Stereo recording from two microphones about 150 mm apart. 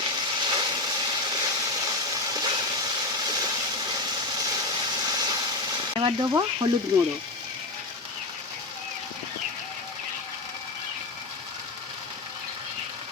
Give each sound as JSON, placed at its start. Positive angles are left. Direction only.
{"t": 0.0, "sound": "vehicle", "side_deg": -30}
{"t": 6.0, "sound": "speech", "side_deg": -30}